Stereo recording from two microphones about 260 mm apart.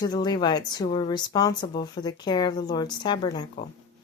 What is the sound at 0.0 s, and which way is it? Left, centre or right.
Speech, centre.